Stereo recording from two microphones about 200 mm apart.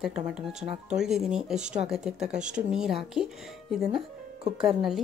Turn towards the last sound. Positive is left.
turn(degrees=0)  # may be behind; listen again after turning